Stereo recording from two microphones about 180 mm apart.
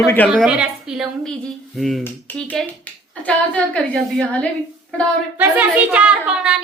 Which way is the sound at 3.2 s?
5° left (ahead or behind).